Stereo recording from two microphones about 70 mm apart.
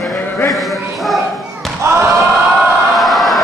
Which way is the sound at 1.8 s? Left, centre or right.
Right.